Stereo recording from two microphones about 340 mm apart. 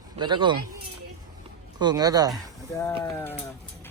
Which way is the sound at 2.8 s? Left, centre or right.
Centre.